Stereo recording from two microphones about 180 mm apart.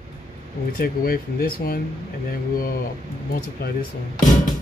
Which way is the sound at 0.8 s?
55° left (ahead or behind).